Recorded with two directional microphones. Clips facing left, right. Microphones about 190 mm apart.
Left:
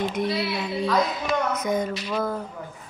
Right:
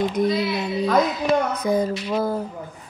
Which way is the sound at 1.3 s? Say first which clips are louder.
Right 4 dB; 35° right (ahead or behind).